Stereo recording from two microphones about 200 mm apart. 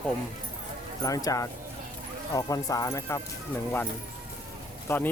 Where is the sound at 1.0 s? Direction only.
15° left (ahead or behind).